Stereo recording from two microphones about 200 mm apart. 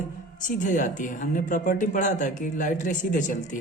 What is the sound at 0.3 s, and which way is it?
Speech, 40° left (ahead or behind).